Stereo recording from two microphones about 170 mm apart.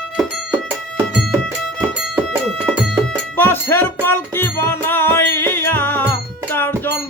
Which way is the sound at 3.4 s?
10° left (ahead or behind).